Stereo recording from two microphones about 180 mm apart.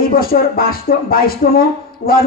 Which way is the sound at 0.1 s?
55° left (ahead or behind).